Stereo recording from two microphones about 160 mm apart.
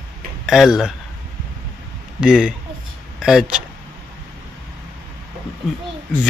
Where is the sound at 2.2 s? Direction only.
5° right (ahead or behind).